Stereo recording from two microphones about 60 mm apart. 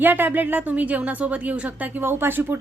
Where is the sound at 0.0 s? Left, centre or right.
Right.